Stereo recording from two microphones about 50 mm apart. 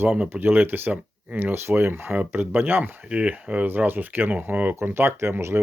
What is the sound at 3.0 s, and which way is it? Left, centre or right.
Speech, right.